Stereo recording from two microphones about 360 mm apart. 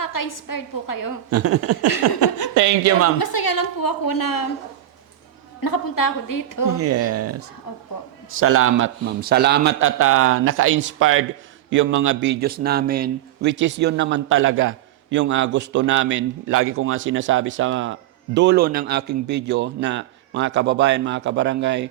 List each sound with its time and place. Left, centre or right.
0.0 s a woman's voice: left
1.3 s a man's voice: right
3.2 s a woman's voice: left
5.6 s a woman's voice: left
6.7 s a man's voice: right